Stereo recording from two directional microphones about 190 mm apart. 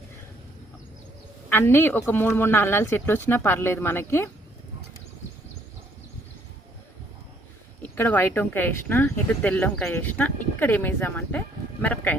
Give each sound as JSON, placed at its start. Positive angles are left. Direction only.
{"t": 1.5, "sound": "speech", "side_deg": 10}
{"t": 7.8, "sound": "speech", "side_deg": 10}